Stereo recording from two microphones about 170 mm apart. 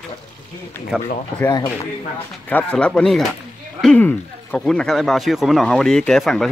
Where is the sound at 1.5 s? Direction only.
20° left (ahead or behind).